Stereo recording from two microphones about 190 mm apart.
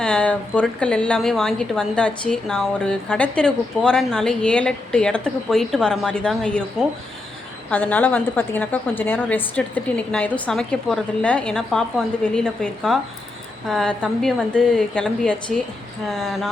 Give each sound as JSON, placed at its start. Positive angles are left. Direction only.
{"t": 0.0, "sound": "a woman's voice", "side_deg": 5}